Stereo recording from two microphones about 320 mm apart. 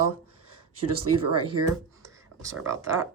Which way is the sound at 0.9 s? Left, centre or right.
Right.